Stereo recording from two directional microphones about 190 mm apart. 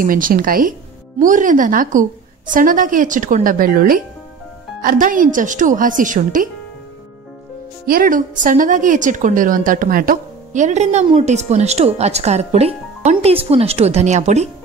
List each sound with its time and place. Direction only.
0.0 s a woman's voice: 45° right (ahead or behind)
7.8 s a woman's voice: 50° right (ahead or behind)